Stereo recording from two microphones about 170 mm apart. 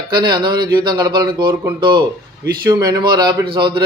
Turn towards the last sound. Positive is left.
turn(degrees=-30)  # may be behind; listen again after turning